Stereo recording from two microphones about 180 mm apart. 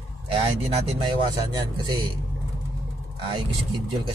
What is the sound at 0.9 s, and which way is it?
Speech, 25° right (ahead or behind).